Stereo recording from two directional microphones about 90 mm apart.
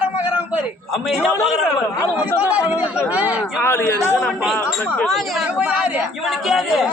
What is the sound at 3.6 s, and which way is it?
Speech, 25° left (ahead or behind).